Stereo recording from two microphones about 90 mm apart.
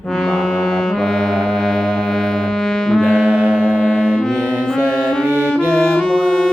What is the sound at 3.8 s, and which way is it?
Music, 10° left (ahead or behind).